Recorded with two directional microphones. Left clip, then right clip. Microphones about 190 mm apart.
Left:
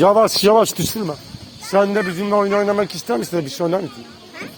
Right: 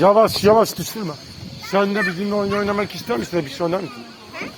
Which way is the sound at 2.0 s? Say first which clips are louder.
Left 3 dB; 25° left (ahead or behind).